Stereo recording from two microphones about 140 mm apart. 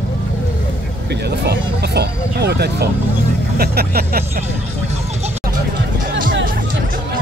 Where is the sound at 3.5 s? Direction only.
90° right.